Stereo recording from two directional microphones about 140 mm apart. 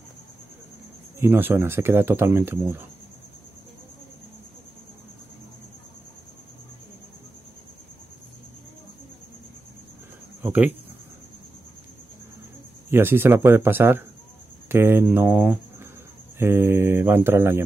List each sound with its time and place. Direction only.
1.2 s speech: 15° right (ahead or behind)
10.4 s speech: 10° right (ahead or behind)
12.9 s speech: 15° right (ahead or behind)